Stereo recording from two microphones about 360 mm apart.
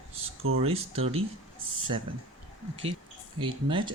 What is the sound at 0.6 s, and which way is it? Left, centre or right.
Speech, centre.